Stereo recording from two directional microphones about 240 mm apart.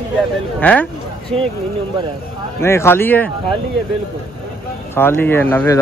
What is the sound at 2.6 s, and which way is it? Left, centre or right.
Speech, centre.